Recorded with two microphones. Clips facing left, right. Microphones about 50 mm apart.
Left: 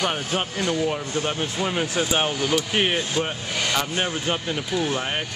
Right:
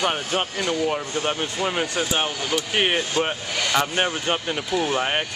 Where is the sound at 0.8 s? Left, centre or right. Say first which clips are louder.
Right 1 dB; centre.